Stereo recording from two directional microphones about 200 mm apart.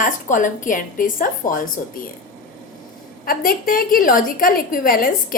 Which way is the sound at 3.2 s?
45° left (ahead or behind).